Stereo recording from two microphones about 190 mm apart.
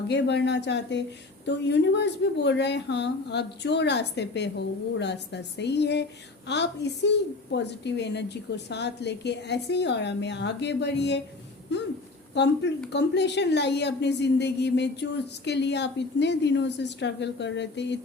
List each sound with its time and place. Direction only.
0.1 s a woman's voice: 65° left (ahead or behind)